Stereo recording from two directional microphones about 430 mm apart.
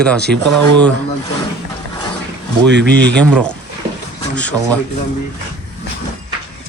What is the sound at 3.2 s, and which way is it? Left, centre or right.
Speech, centre.